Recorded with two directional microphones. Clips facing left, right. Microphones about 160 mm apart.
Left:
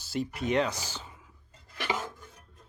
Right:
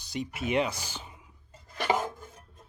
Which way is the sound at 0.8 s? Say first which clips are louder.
Even; 15° right (ahead or behind).